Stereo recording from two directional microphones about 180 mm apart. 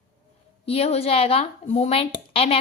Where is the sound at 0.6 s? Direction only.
35° left (ahead or behind).